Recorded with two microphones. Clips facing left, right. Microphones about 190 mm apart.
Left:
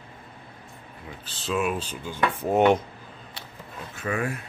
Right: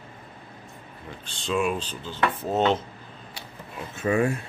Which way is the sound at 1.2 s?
5° left (ahead or behind).